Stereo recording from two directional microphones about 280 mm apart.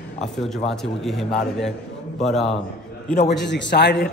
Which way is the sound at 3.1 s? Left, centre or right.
Left.